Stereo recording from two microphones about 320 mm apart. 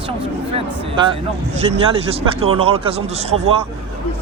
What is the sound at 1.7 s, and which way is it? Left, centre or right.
Speech, centre.